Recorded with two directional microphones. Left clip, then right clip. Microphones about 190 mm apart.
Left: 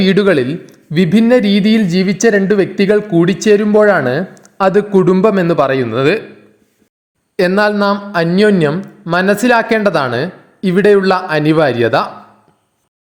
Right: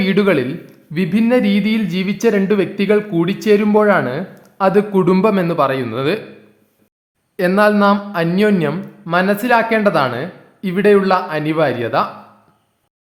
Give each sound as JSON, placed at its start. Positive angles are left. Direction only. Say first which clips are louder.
{"t": 0.0, "sound": "speech", "louder": "left 4 dB", "side_deg": 25}
{"t": 7.3, "sound": "speech", "louder": "left 1 dB", "side_deg": 25}